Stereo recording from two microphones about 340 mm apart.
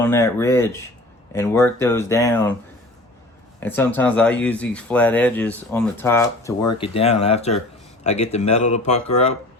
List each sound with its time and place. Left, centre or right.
0.0 s speech: centre
3.6 s speech: centre